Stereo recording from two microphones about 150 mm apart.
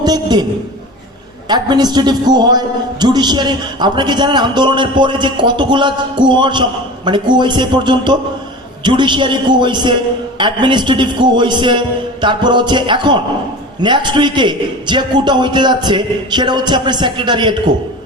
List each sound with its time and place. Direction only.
0.0 s a man's voice: 30° right (ahead or behind)
1.5 s a man's voice: 30° right (ahead or behind)